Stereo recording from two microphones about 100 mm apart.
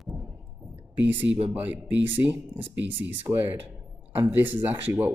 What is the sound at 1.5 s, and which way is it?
Speech, 15° right (ahead or behind).